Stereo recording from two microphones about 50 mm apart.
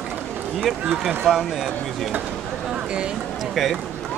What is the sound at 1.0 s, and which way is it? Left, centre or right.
Speech, centre.